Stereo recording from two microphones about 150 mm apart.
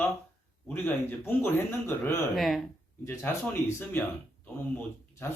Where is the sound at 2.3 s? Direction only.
Centre (ahead or behind).